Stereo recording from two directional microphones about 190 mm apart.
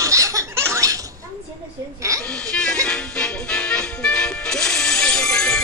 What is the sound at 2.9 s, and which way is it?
Music, 5° left (ahead or behind).